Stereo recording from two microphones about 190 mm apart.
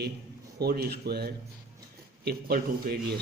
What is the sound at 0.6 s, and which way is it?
A man's voice, 55° right (ahead or behind).